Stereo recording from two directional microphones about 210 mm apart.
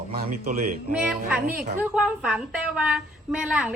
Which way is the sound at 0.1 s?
45° right (ahead or behind).